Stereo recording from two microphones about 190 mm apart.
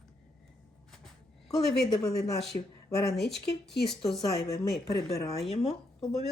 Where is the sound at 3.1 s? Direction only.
60° left (ahead or behind).